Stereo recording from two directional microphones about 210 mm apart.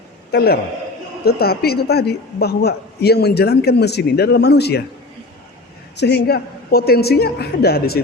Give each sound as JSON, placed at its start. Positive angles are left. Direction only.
{"t": 0.3, "sound": "a man's voice", "side_deg": 45}
{"t": 6.0, "sound": "a man's voice", "side_deg": 50}